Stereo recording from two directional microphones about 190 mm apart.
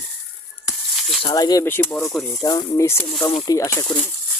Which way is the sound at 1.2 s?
20° left (ahead or behind).